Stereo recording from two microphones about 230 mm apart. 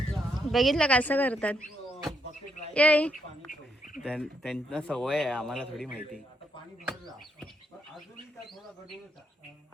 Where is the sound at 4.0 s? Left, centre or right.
Centre.